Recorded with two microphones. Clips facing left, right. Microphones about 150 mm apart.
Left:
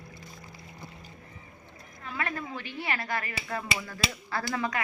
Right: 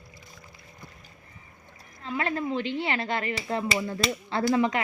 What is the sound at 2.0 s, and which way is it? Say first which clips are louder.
Speech: right 6 dB; 25° right (ahead or behind).